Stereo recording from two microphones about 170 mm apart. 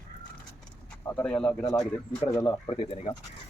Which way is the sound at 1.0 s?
10° left (ahead or behind).